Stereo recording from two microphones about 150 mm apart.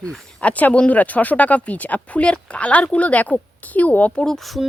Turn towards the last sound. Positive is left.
turn(degrees=0)  # may be behind; listen again after turning